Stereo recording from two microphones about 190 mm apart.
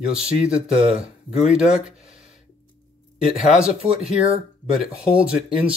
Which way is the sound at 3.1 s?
5° right (ahead or behind).